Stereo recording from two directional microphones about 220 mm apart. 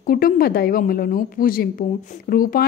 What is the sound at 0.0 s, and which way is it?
A woman's voice, 40° left (ahead or behind).